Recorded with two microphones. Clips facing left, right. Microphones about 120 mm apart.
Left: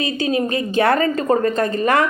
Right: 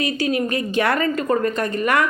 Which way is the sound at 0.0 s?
25° left (ahead or behind).